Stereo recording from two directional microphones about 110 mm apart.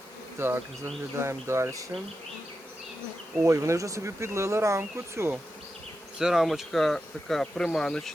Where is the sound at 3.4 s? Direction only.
25° right (ahead or behind).